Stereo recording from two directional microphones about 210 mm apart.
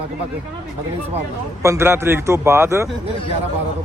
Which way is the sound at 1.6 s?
15° right (ahead or behind).